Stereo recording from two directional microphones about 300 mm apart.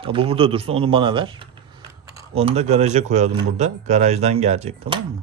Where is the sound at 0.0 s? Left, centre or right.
Centre.